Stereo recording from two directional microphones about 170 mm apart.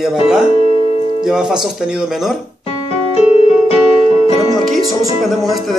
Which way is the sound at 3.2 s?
35° left (ahead or behind).